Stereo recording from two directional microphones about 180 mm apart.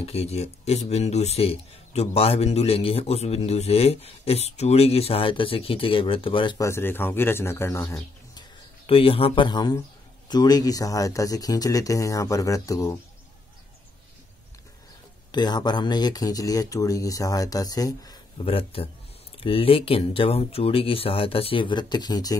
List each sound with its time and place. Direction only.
0.0 s speech: 35° left (ahead or behind)
6.6 s a man's voice: 15° left (ahead or behind)
8.8 s speech: 30° left (ahead or behind)
15.3 s speech: 25° left (ahead or behind)
18.4 s speech: 30° left (ahead or behind)